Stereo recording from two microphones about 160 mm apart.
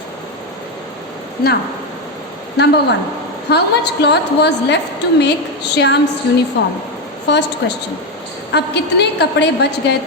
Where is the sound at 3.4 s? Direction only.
90° left.